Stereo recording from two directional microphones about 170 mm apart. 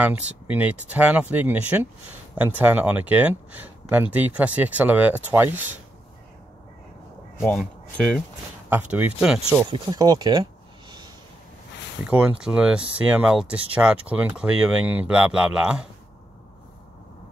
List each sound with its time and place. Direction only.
0.0 s speech: 10° right (ahead or behind)
8.6 s speech: 10° right (ahead or behind)
9.7 s speech: 25° right (ahead or behind)
12.0 s speech: 5° right (ahead or behind)